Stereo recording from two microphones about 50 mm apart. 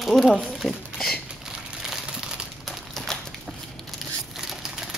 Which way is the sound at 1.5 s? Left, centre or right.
Centre.